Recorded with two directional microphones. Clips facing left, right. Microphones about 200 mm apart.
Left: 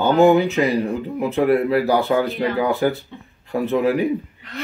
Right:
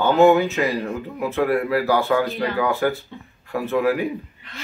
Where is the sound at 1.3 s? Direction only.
20° left (ahead or behind).